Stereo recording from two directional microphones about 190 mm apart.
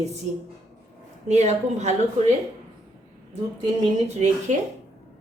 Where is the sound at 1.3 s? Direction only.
35° right (ahead or behind).